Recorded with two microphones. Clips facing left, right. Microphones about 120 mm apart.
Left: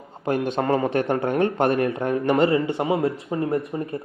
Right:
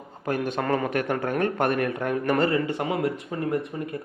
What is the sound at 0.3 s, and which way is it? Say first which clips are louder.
Speech: left 3 dB; 30° left (ahead or behind).